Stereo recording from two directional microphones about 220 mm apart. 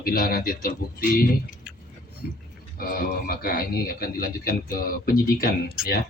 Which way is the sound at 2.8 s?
40° left (ahead or behind).